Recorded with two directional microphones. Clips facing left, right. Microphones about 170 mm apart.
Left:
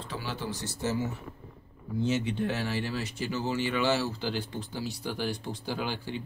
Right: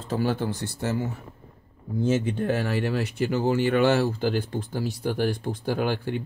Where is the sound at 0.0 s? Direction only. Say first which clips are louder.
Right 10 dB; 45° right (ahead or behind).